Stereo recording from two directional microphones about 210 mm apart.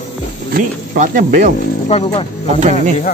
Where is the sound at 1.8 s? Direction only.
30° left (ahead or behind).